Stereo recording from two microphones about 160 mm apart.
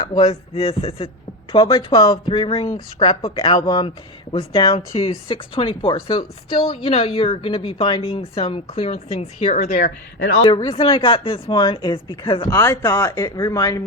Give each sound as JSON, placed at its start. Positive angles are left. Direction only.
{"t": 0.2, "sound": "speech", "side_deg": 40}
{"t": 1.5, "sound": "speech", "side_deg": 25}
{"t": 9.6, "sound": "speech", "side_deg": 65}
{"t": 10.4, "sound": "speech", "side_deg": 25}
{"t": 12.5, "sound": "speech", "side_deg": 20}